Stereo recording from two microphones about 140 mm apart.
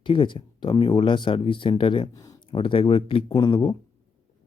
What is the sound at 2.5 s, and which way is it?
Speech, 40° left (ahead or behind).